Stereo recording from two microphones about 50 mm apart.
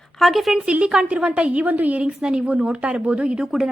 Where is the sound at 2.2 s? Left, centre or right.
Centre.